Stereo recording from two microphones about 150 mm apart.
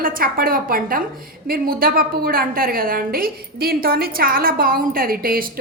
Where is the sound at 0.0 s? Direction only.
70° right (ahead or behind).